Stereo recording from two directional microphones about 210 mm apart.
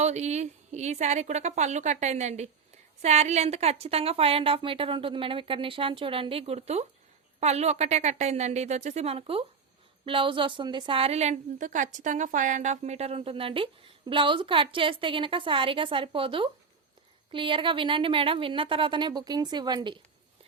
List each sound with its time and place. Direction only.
0.0 s a woman's voice: 35° right (ahead or behind)